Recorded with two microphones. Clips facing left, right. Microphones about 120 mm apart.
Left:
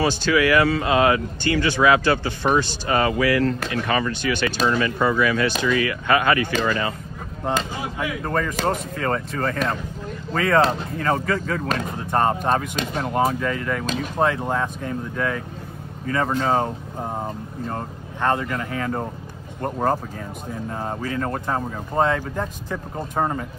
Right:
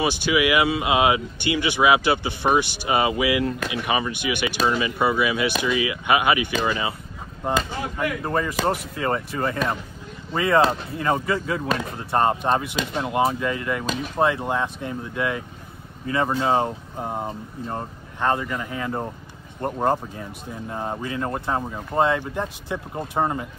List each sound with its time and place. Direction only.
0.0 s speech: 15° right (ahead or behind)
8.3 s speech: 20° right (ahead or behind)
17.0 s speech: 5° right (ahead or behind)
17.7 s speech: 15° right (ahead or behind)
22.9 s speech: 5° right (ahead or behind)